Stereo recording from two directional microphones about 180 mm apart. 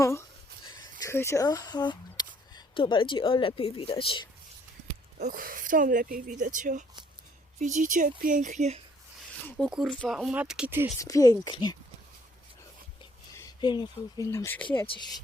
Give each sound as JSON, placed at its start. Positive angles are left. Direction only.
{"t": 0.0, "sound": "speech", "side_deg": 15}
{"t": 5.2, "sound": "speech", "side_deg": -50}
{"t": 9.5, "sound": "speech", "side_deg": 0}
{"t": 11.0, "sound": "speech", "side_deg": 20}
{"t": 13.3, "sound": "speech", "side_deg": 20}